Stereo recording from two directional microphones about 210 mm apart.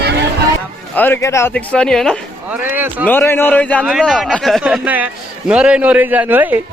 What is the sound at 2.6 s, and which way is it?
Speech, 10° right (ahead or behind).